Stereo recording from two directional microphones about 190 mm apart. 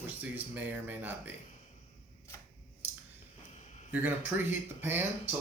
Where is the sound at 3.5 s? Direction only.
35° left (ahead or behind).